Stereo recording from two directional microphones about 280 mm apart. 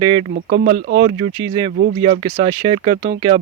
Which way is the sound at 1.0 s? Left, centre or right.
Centre.